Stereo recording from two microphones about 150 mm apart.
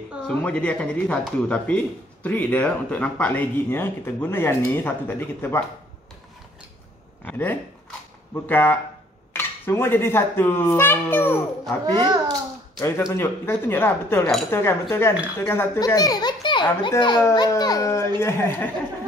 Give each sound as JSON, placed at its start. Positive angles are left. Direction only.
{"t": 0.3, "sound": "speech", "side_deg": 10}
{"t": 7.2, "sound": "speech", "side_deg": 15}
{"t": 11.9, "sound": "a child's voice", "side_deg": -30}
{"t": 12.7, "sound": "a child's voice", "side_deg": 20}